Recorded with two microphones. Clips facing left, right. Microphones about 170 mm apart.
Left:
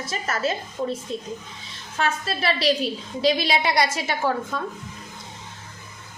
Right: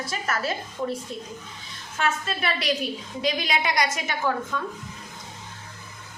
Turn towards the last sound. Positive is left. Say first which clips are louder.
# left 2 dB
turn(degrees=30)  # may be behind; listen again after turning